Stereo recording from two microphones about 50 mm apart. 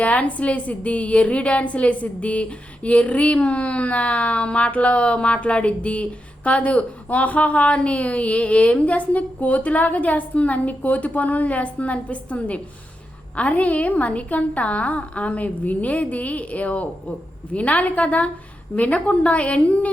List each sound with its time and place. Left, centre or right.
0.0 s a woman's voice: left